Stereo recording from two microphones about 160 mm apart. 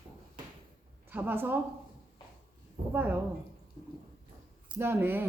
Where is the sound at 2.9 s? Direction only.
10° right (ahead or behind).